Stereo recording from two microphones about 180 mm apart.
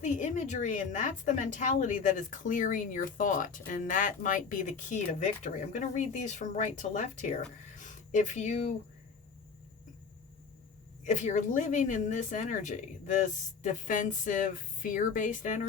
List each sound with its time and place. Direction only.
0.0 s speech: 45° left (ahead or behind)
7.8 s a sound: 45° left (ahead or behind)
11.0 s speech: 45° left (ahead or behind)